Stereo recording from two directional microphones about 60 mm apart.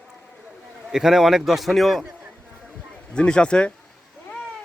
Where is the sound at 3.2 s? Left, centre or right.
Centre.